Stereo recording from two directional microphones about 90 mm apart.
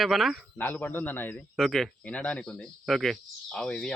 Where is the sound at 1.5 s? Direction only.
Centre (ahead or behind).